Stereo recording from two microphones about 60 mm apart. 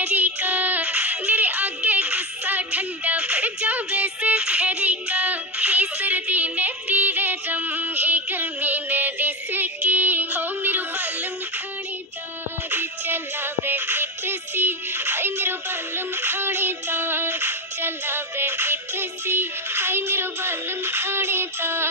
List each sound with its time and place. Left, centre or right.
0.0 s music: right
12.7 s music: right